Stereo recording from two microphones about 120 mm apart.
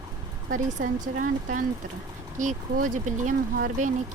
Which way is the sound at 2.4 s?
90° right.